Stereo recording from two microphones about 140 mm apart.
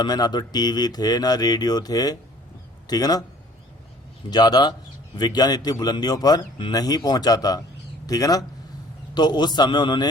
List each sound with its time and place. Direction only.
0.0 s a man's voice: 30° left (ahead or behind)
4.3 s a man's voice: 30° left (ahead or behind)